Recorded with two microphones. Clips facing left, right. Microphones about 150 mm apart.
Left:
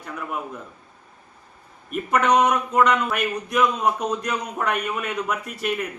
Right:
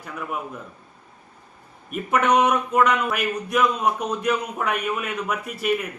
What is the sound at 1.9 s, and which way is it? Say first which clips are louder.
Speech: even; centre (ahead or behind).